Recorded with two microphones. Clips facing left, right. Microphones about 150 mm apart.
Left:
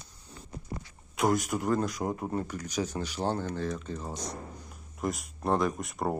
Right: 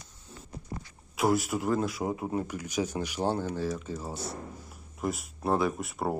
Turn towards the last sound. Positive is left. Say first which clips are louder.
# even
turn(degrees=-5)  # may be behind; listen again after turning